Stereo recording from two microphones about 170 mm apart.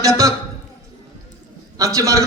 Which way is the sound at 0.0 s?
20° right (ahead or behind).